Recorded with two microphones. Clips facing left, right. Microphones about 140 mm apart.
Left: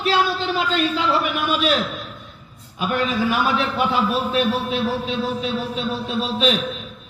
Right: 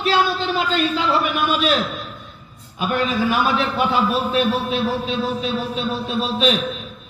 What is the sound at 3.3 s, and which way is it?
A man's voice, 40° right (ahead or behind).